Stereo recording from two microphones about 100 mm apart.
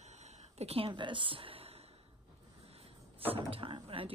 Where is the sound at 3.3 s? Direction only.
60° right (ahead or behind).